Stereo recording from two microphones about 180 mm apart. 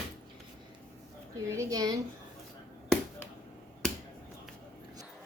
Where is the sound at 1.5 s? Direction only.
15° right (ahead or behind).